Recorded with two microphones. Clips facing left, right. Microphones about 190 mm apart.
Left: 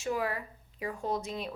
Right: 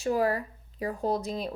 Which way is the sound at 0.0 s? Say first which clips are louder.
Right 6 dB; 40° right (ahead or behind).